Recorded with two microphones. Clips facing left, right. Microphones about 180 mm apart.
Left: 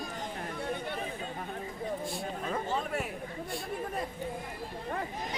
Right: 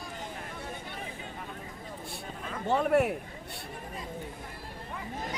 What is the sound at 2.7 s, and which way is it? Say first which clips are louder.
Speech: right 8 dB; 60° right (ahead or behind).